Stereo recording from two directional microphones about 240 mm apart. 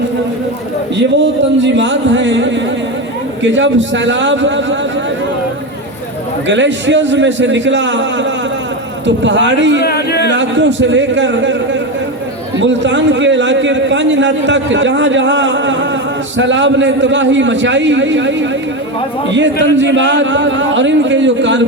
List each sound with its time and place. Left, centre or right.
1.2 s a man's voice: right
6.5 s a man's voice: right
9.8 s a sound: left
10.2 s a man's voice: right